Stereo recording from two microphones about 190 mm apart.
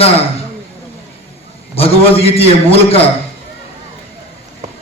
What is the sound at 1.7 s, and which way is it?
A man's voice, 30° left (ahead or behind).